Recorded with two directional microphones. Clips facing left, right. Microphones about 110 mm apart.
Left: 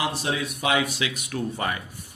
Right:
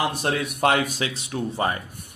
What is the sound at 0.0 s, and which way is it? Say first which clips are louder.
A man's voice: right 3 dB; 50° right (ahead or behind).